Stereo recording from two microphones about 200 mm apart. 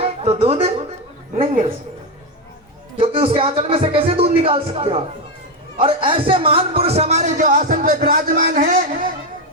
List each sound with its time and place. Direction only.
0.0 s music: 30° right (ahead or behind)
2.9 s speech: 25° right (ahead or behind)